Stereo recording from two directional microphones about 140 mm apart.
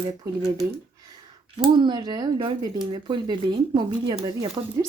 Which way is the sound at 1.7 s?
30° right (ahead or behind).